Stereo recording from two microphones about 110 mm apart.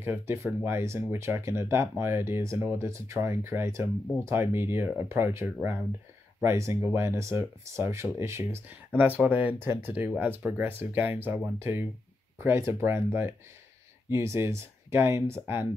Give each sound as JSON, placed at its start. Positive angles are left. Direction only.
{"t": 0.0, "sound": "speech", "side_deg": -20}